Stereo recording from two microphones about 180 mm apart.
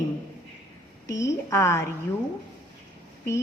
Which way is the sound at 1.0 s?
20° left (ahead or behind).